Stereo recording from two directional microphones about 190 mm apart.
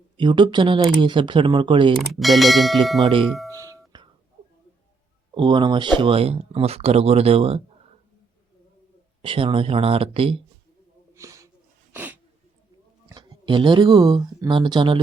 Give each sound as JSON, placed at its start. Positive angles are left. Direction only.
{"t": 0.2, "sound": "speech", "side_deg": -25}
{"t": 2.0, "sound": "speech", "side_deg": 0}
{"t": 3.5, "sound": "music", "side_deg": -20}
{"t": 5.3, "sound": "speech", "side_deg": -25}
{"t": 9.2, "sound": "speech", "side_deg": -30}
{"t": 11.1, "sound": "snort", "side_deg": -15}
{"t": 11.9, "sound": "sneeze", "side_deg": -10}
{"t": 13.1, "sound": "speech", "side_deg": -25}